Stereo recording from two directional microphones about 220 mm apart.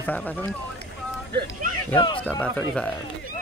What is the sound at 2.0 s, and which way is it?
Run, 25° left (ahead or behind).